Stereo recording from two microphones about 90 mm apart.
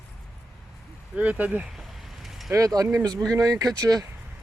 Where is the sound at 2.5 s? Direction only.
40° right (ahead or behind).